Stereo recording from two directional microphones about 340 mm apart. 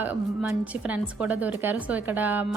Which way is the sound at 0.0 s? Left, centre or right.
Centre.